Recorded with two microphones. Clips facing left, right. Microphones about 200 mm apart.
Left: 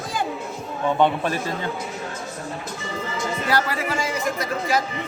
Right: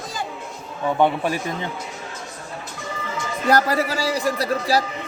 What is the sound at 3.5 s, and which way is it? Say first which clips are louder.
Speech: right 6 dB; 40° right (ahead or behind).